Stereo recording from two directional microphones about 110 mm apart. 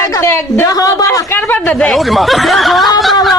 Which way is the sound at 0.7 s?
35° left (ahead or behind).